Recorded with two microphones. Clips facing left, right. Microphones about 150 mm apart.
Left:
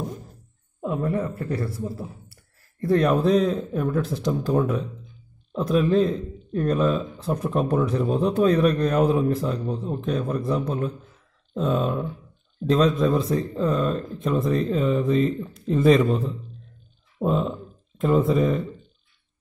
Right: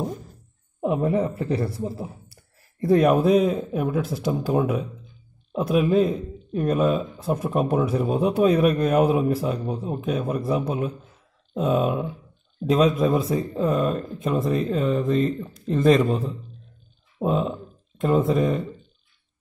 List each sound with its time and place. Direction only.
0.7 s speech: 20° right (ahead or behind); by 18.7 s centre (ahead or behind)